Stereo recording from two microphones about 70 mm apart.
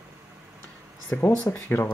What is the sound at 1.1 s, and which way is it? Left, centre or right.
Speech, left.